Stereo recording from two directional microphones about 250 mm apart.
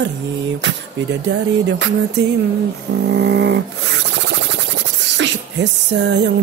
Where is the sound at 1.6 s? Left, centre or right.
Right.